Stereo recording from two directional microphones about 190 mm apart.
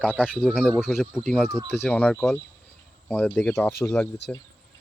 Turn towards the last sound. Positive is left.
turn(degrees=10)  # may be behind; listen again after turning